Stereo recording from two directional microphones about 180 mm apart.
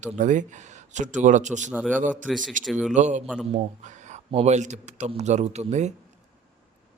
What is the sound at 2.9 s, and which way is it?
Speech, 40° right (ahead or behind).